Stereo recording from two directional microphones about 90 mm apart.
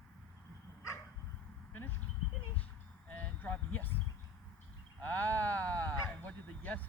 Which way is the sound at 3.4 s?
20° left (ahead or behind).